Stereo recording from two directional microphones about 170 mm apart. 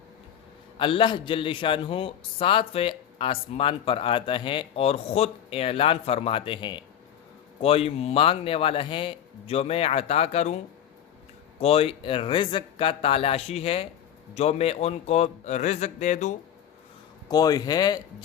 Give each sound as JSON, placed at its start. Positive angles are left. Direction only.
{"t": 0.8, "sound": "a man's voice", "side_deg": 30}
{"t": 11.6, "sound": "a man's voice", "side_deg": 35}
{"t": 17.2, "sound": "speech", "side_deg": 20}